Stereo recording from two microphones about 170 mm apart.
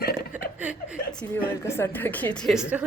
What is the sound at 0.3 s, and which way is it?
Chuckle, 10° right (ahead or behind).